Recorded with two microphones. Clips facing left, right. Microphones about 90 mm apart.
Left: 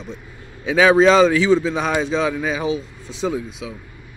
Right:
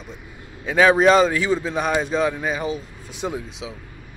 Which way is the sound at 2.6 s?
50° right (ahead or behind).